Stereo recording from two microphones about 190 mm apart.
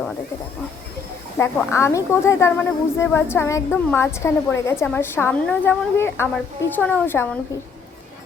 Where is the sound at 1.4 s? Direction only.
15° left (ahead or behind).